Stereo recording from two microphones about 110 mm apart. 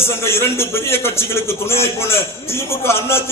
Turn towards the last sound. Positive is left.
turn(degrees=25)  # may be behind; listen again after turning